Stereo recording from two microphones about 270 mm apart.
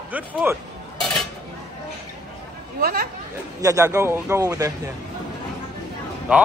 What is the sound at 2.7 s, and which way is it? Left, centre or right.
Speech, right.